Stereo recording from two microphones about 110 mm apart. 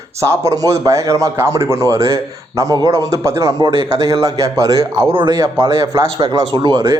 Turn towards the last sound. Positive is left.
turn(degrees=-40)  # may be behind; listen again after turning